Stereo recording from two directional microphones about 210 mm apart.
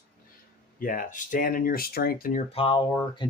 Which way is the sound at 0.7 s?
40° left (ahead or behind).